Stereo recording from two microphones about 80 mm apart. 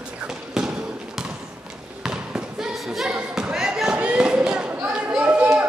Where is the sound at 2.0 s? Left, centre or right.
Centre.